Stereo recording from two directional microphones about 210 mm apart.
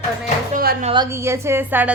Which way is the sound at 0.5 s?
40° right (ahead or behind).